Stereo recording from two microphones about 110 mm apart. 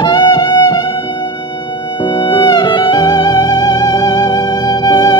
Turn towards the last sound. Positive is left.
turn(degrees=40)  # may be behind; listen again after turning